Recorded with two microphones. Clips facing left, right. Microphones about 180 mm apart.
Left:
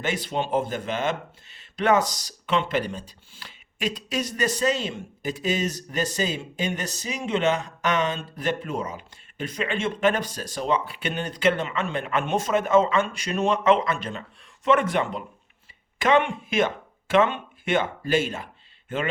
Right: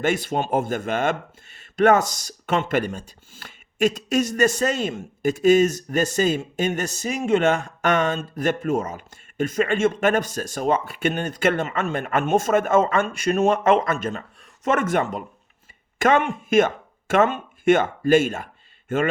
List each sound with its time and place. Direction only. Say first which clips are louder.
0.0 s speech: right 4 dB; 50° right (ahead or behind)